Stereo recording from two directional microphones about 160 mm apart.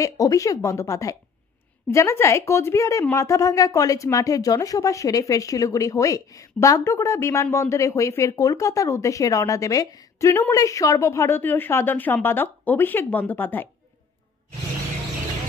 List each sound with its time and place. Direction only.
0.0 s speech: 20° left (ahead or behind)